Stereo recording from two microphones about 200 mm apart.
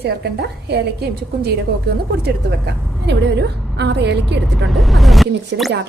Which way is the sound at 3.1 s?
55° right (ahead or behind).